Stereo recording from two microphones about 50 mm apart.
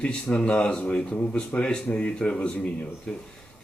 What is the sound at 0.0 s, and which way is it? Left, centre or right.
Speech, left.